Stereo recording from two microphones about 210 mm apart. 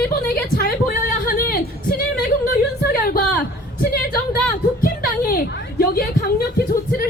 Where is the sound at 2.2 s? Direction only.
45° left (ahead or behind).